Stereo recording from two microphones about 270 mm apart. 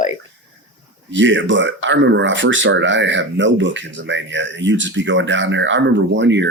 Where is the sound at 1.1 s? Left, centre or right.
Right.